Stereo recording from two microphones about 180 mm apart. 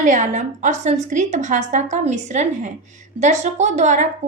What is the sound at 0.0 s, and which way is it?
A woman's voice, 40° right (ahead or behind).